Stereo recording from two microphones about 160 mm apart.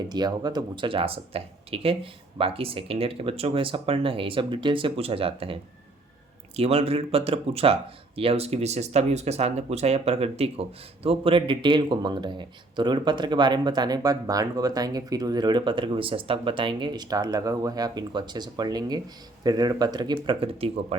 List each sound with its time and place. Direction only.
0.1 s speech: 25° right (ahead or behind)
6.6 s speech: 40° right (ahead or behind)